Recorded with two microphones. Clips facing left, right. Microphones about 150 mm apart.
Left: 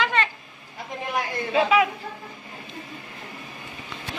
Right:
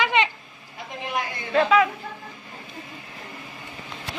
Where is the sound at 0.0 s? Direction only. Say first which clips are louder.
Right 2 dB; 15° right (ahead or behind).